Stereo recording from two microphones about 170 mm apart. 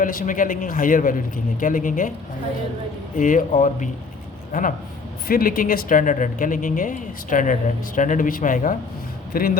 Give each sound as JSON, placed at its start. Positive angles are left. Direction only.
{"t": 0.0, "sound": "speech", "side_deg": 55}
{"t": 3.2, "sound": "speech", "side_deg": 50}
{"t": 5.3, "sound": "a man's voice", "side_deg": 55}